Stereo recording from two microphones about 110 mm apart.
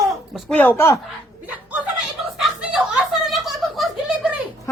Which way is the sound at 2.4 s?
5° right (ahead or behind).